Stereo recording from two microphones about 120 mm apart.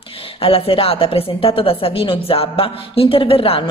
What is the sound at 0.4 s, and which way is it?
A woman's voice, 50° left (ahead or behind).